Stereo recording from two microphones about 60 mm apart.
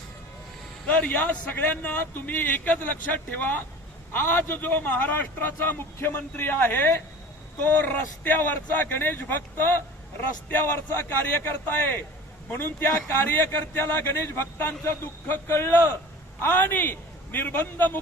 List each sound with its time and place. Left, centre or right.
0.9 s a man's voice: left